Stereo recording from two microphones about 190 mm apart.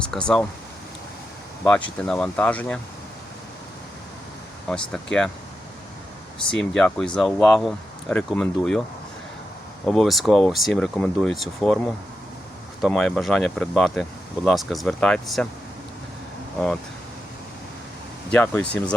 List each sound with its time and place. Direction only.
0.1 s speech: 5° left (ahead or behind)
1.6 s speech: 5° left (ahead or behind)
4.7 s speech: 5° left (ahead or behind)
6.5 s speech: 5° left (ahead or behind)
9.8 s speech: centre (ahead or behind)
12.8 s speech: centre (ahead or behind)
18.3 s speech: 5° left (ahead or behind)